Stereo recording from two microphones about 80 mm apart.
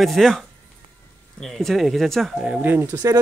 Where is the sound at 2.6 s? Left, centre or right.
Right.